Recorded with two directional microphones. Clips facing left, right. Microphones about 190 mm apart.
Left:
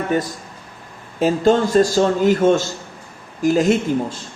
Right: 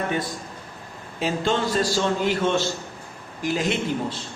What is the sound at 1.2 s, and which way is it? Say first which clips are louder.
A man's voice: left 8 dB; 45° left (ahead or behind).